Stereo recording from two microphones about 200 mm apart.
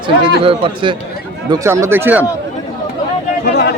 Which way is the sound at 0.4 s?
25° right (ahead or behind).